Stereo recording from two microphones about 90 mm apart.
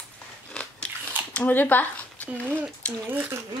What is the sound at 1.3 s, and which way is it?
Speech, 20° left (ahead or behind).